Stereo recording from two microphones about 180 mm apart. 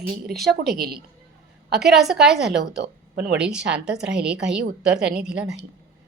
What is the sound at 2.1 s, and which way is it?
Speech, centre (ahead or behind).